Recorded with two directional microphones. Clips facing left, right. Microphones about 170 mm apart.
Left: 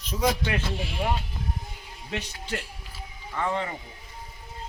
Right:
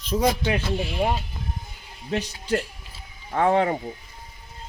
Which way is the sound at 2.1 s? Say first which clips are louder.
Right 8 dB; 40° right (ahead or behind).